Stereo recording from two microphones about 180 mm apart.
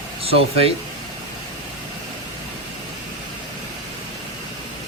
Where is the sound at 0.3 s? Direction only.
35° right (ahead or behind).